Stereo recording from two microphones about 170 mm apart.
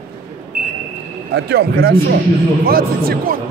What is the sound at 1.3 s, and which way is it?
A man's voice, 70° right (ahead or behind).